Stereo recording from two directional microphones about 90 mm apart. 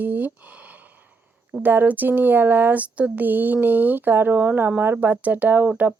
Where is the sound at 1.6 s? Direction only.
20° right (ahead or behind).